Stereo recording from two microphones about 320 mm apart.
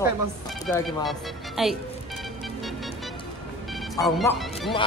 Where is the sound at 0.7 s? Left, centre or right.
Centre.